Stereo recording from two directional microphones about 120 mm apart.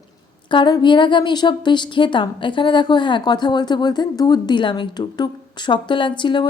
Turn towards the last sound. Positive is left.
turn(degrees=40)  # may be behind; listen again after turning